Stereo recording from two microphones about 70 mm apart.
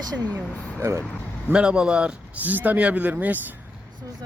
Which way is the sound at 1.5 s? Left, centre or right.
Centre.